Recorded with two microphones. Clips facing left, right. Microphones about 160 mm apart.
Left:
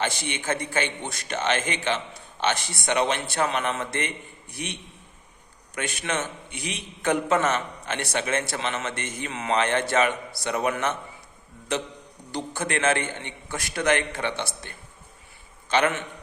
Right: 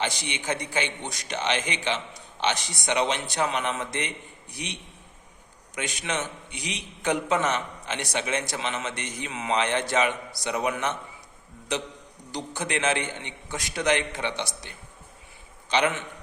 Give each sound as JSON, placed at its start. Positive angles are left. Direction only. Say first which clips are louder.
{"t": 0.0, "sound": "a man's voice", "louder": "left 2 dB", "side_deg": -15}
{"t": 5.7, "sound": "a man's voice", "louder": "left 2 dB", "side_deg": -15}
{"t": 12.3, "sound": "a man's voice", "louder": "left 2 dB", "side_deg": -15}
{"t": 15.7, "sound": "a man's voice", "louder": "left 1 dB", "side_deg": -15}